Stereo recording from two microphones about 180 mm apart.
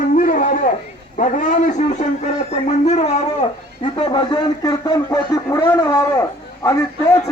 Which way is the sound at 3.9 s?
25° left (ahead or behind).